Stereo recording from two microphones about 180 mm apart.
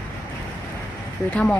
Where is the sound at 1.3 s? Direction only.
5° left (ahead or behind).